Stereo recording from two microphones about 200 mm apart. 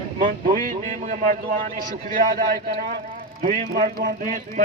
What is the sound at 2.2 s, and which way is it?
A man's voice, 45° right (ahead or behind).